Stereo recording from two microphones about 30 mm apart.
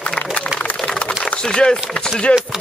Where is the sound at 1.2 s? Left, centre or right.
Left.